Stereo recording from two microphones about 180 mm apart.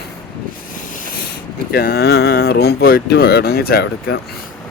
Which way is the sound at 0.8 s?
50° left (ahead or behind).